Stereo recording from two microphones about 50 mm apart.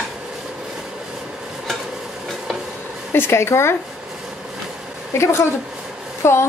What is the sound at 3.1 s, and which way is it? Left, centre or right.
Speech, left.